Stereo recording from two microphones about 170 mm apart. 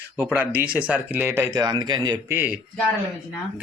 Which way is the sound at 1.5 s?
25° right (ahead or behind).